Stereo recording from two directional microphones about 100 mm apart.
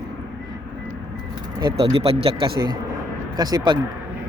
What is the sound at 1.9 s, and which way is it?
Speech, 70° right (ahead or behind).